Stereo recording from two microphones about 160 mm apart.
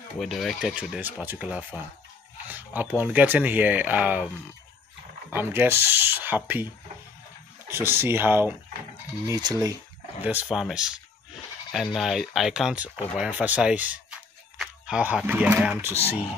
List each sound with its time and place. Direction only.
0.2 s speech: centre (ahead or behind)
5.3 s speech: 15° right (ahead or behind)
7.7 s speech: 15° right (ahead or behind)
10.2 s speech: 5° right (ahead or behind)